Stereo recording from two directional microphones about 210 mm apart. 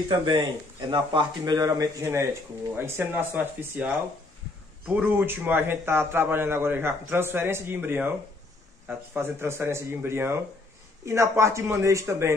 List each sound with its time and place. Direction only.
0.1 s a man's voice: 20° right (ahead or behind)